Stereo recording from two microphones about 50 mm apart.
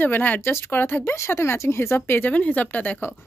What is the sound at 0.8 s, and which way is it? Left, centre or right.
Speech, left.